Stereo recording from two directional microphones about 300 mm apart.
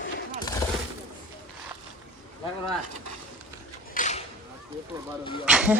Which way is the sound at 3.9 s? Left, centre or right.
Left.